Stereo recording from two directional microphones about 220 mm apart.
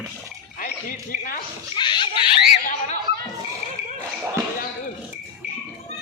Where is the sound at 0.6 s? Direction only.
35° left (ahead or behind).